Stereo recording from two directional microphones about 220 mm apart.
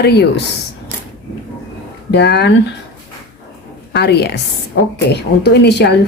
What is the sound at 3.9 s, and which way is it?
Speech, 45° left (ahead or behind).